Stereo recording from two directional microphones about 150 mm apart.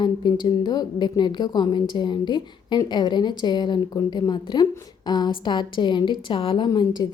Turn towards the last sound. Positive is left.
turn(degrees=30)  # may be behind; listen again after turning